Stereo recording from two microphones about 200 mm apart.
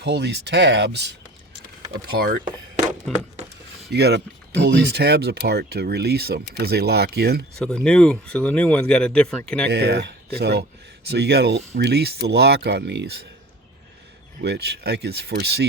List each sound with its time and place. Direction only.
0.0 s speech: 55° right (ahead or behind)
3.9 s speech: 55° right (ahead or behind)
7.6 s speech: 5° left (ahead or behind)
9.6 s speech: 55° right (ahead or behind)
14.4 s speech: 55° right (ahead or behind)